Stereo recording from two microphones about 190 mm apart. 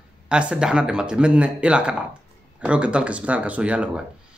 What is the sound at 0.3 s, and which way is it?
Speech, 5° right (ahead or behind).